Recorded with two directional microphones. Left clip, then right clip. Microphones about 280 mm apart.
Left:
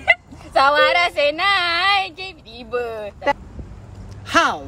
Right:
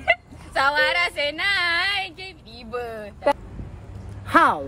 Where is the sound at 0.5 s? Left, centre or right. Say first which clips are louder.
Left 5 dB; centre.